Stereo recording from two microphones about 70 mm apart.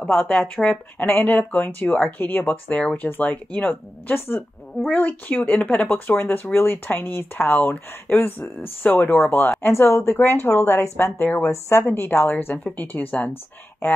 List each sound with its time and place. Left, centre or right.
0.3 s speech: centre